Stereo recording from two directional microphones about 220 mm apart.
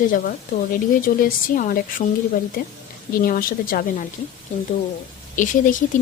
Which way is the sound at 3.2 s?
40° left (ahead or behind).